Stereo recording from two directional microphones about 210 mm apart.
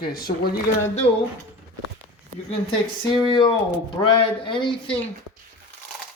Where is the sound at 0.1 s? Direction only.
45° left (ahead or behind).